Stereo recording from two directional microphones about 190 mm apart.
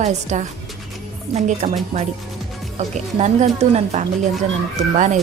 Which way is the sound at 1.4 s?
40° right (ahead or behind).